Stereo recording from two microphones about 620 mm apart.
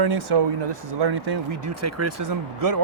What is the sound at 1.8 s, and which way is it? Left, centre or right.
Speech, right.